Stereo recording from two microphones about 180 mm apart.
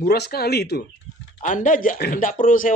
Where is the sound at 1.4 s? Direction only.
45° left (ahead or behind).